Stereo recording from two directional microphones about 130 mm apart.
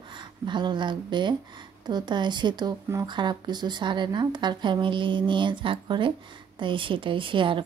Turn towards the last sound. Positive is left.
turn(degrees=-40)  # may be behind; listen again after turning